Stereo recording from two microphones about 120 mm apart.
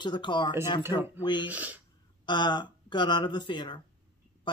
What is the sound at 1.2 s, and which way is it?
Speech, 40° left (ahead or behind).